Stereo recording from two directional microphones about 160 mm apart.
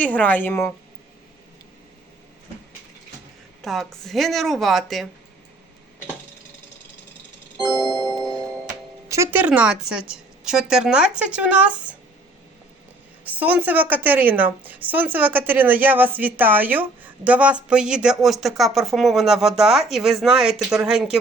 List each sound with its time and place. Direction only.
0.0 s a woman's voice: 10° left (ahead or behind)
3.6 s speech: centre (ahead or behind)
7.9 s music: 20° left (ahead or behind)
9.0 s a woman's voice: 15° right (ahead or behind)
13.2 s a woman's voice: 10° right (ahead or behind)